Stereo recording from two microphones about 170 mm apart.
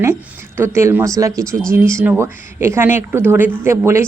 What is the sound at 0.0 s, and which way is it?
Speech, 15° right (ahead or behind).